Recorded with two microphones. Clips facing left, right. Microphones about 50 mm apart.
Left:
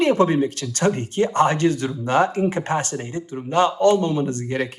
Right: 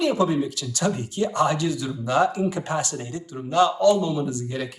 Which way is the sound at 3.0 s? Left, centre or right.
Left.